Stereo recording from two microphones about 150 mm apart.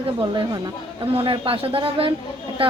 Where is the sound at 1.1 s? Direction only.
35° right (ahead or behind).